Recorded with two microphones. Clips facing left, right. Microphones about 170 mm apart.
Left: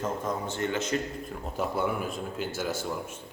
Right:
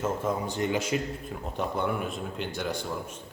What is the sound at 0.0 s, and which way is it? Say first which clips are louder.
Speech: right 2 dB; 10° right (ahead or behind).